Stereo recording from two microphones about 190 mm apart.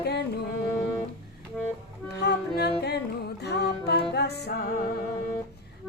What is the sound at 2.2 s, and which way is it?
Music, 60° left (ahead or behind).